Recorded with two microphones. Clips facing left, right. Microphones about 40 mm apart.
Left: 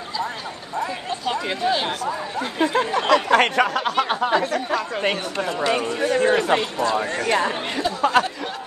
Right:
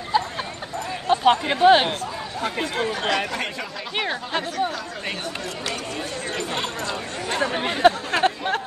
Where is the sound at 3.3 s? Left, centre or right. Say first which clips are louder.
Left 11 dB; left.